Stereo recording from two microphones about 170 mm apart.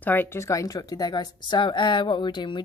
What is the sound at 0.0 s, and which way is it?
A woman's voice, 10° left (ahead or behind).